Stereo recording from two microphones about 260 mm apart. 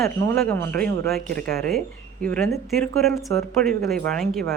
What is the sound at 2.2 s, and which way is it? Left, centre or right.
Speech, centre.